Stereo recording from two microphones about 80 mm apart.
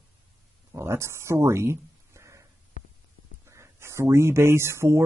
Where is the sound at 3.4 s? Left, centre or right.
Right.